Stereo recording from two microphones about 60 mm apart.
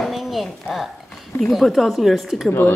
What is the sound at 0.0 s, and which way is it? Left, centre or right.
A woman's voice, centre.